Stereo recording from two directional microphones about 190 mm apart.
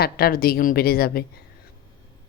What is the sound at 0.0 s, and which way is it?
A woman's voice, 50° left (ahead or behind).